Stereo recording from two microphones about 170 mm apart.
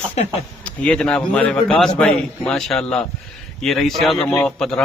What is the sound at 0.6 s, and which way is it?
A man's voice, 5° left (ahead or behind).